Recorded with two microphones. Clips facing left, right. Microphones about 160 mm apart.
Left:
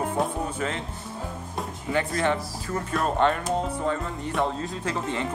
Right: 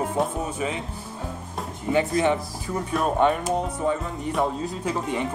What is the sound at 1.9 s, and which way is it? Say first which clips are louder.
Speech: right 4 dB; 15° right (ahead or behind).